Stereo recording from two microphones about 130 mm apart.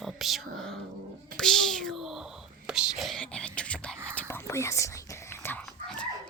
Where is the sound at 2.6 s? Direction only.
5° right (ahead or behind); by 4.8 s 20° left (ahead or behind).